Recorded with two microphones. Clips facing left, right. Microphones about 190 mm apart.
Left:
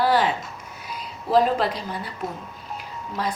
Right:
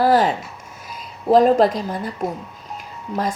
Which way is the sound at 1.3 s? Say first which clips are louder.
Right 6 dB; 45° right (ahead or behind).